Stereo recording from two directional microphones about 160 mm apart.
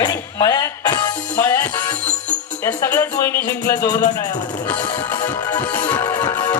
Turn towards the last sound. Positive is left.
turn(degrees=10)  # may be behind; listen again after turning